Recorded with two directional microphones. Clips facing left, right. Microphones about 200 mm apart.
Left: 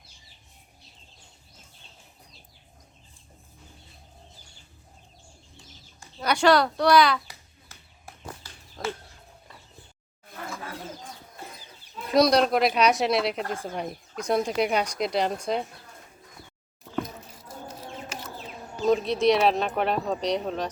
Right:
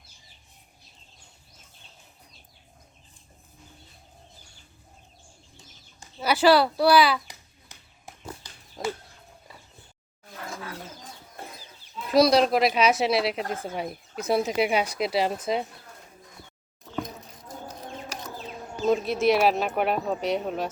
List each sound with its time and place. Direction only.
6.1 s speech: 5° right (ahead or behind)
7.7 s a sound: 15° right (ahead or behind)
12.1 s speech: centre (ahead or behind)
18.9 s speech: 5° right (ahead or behind)